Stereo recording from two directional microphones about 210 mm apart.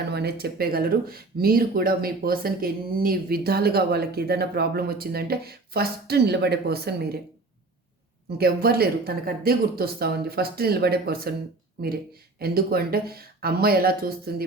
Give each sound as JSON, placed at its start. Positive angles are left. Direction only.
{"t": 0.1, "sound": "speech", "side_deg": -50}
{"t": 8.4, "sound": "speech", "side_deg": -45}